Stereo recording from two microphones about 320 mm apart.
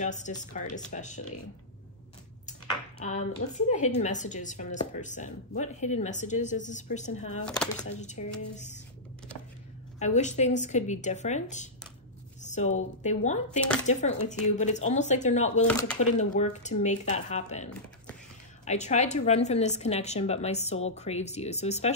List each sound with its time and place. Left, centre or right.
0.0 s a woman's voice: left
3.1 s a woman's voice: left
7.4 s speech: centre
7.9 s a woman's voice: left
9.9 s a woman's voice: left
18.7 s a woman's voice: left